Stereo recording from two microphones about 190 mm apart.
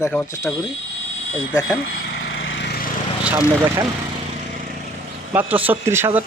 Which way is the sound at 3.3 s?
5° right (ahead or behind).